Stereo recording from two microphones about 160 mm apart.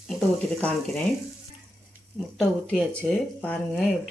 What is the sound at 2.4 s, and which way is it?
Speech, 5° left (ahead or behind).